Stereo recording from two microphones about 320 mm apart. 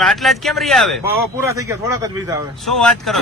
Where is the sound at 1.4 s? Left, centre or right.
Centre.